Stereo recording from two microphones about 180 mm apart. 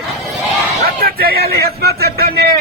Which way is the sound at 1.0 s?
55° right (ahead or behind).